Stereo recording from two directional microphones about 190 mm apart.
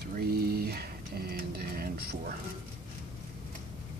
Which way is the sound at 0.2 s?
55° right (ahead or behind).